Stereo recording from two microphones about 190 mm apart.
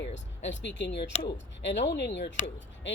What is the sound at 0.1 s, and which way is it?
Speech, 70° left (ahead or behind).